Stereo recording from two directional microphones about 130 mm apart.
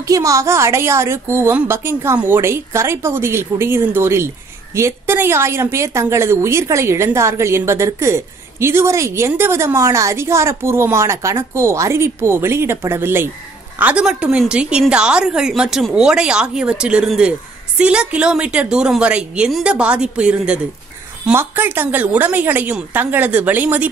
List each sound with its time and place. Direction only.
0.0 s a woman's voice: 25° right (ahead or behind)